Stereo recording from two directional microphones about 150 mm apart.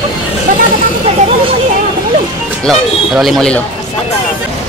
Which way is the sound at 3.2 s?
Centre (ahead or behind).